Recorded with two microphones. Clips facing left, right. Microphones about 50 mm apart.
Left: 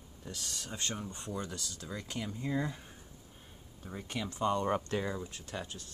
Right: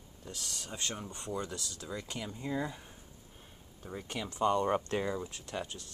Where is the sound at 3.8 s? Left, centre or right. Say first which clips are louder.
Even; centre.